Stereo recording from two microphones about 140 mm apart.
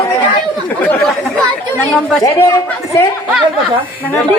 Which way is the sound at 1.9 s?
Centre (ahead or behind).